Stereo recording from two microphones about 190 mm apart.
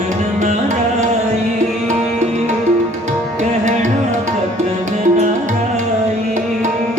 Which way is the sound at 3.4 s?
40° right (ahead or behind).